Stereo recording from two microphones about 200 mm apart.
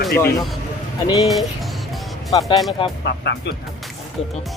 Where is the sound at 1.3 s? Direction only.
Centre (ahead or behind).